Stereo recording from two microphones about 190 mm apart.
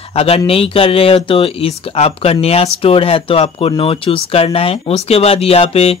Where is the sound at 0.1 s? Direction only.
30° left (ahead or behind).